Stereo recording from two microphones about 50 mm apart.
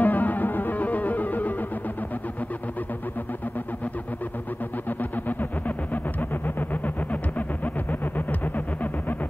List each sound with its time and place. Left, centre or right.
0.0 s music: left